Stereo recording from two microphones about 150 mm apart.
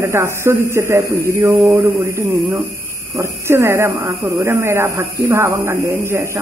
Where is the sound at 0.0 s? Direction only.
20° right (ahead or behind).